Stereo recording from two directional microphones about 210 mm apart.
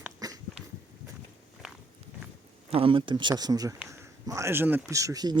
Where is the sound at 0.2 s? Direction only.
20° right (ahead or behind).